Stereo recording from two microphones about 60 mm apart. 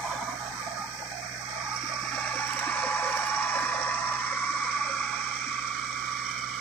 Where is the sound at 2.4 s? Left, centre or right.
Left; by 5.8 s centre.